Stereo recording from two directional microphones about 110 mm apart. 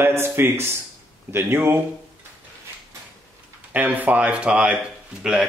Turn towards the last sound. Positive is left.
turn(degrees=-5)  # may be behind; listen again after turning